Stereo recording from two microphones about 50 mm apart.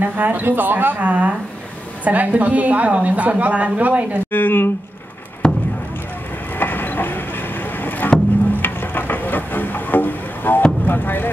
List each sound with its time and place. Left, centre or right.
0.0 s a woman's voice: right
4.3 s speech: left
5.4 s a sound: centre
6.6 s vehicle: left
8.0 s music: left
10.9 s speech: left